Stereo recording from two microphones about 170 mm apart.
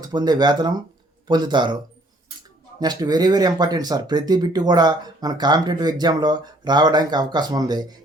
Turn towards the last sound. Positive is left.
turn(degrees=-25)  # may be behind; listen again after turning